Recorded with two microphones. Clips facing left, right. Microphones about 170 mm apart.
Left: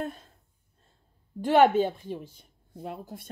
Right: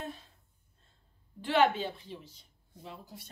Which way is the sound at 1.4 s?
45° left (ahead or behind).